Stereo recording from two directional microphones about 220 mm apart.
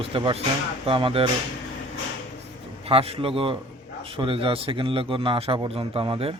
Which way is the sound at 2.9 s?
25° right (ahead or behind).